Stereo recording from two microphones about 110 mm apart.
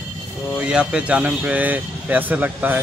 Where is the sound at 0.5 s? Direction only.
10° right (ahead or behind).